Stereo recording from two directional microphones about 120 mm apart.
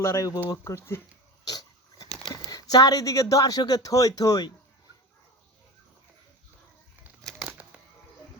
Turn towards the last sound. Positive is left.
turn(degrees=-10)  # may be behind; listen again after turning